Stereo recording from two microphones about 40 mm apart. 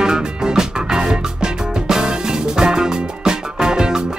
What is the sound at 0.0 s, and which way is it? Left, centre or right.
Music, centre.